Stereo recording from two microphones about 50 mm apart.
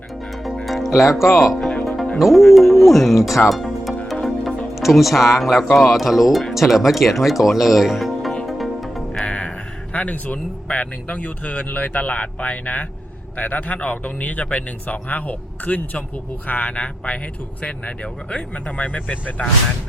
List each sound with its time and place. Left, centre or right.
0.4 s music: centre
2.1 s speech: centre
3.5 s music: centre
5.9 s speech: centre
8.4 s music: centre
9.2 s music: left
9.9 s speech: left